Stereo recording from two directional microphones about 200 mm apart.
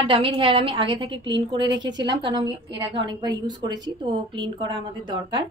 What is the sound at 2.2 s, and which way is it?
A woman's voice, 25° right (ahead or behind).